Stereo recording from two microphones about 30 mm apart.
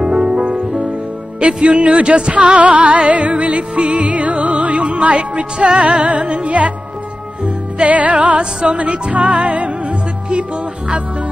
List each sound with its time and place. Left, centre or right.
0.0 s music: right
1.4 s speech: right
2.0 s music: right
5.6 s music: centre
5.9 s music: right
6.4 s speech: right
7.4 s music: right
8.6 s speech: right
9.1 s music: right